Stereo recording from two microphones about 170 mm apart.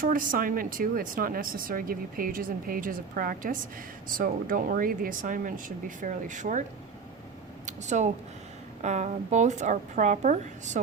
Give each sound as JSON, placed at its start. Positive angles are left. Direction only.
{"t": 0.0, "sound": "speech", "side_deg": -55}
{"t": 7.7, "sound": "speech", "side_deg": -45}